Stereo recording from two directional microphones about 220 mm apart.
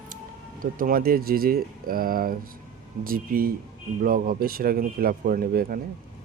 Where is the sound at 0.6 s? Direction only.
40° right (ahead or behind).